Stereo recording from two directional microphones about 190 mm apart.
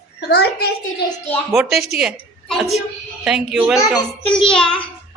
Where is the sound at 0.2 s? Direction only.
60° left (ahead or behind).